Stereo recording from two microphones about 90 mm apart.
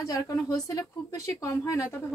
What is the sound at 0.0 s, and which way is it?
A woman's voice, 40° left (ahead or behind).